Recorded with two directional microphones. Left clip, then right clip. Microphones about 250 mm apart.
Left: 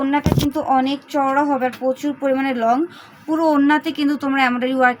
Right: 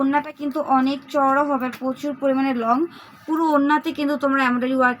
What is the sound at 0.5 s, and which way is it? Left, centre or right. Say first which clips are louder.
Speech: right 1 dB; left.